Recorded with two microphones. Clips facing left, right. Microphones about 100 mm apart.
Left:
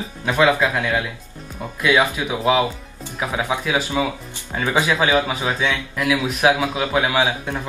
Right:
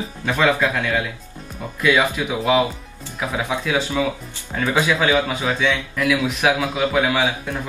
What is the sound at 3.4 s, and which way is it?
A man's voice, 15° left (ahead or behind).